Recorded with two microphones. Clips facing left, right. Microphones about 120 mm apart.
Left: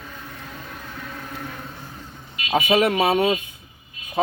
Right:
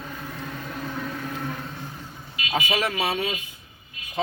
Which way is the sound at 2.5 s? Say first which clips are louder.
Left 7 dB; 60° left (ahead or behind).